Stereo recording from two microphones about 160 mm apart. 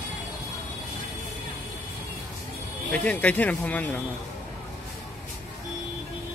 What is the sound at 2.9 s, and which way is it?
Speech, 10° left (ahead or behind).